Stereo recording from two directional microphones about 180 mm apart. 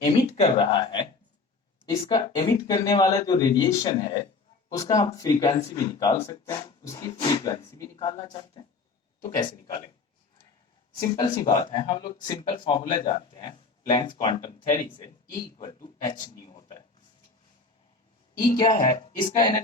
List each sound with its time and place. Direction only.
0.0 s speech: 35° left (ahead or behind)
2.0 s speech: 25° left (ahead or behind)
10.9 s speech: 25° left (ahead or behind)
18.3 s speech: 20° left (ahead or behind)